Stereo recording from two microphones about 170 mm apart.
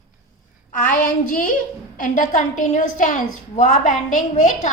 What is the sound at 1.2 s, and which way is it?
A woman's voice, 50° left (ahead or behind).